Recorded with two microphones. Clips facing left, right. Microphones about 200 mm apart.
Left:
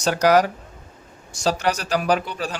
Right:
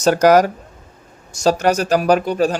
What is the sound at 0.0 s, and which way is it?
A man's voice, 45° right (ahead or behind).